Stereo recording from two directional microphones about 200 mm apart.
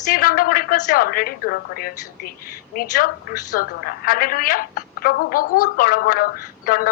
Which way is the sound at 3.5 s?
45° left (ahead or behind).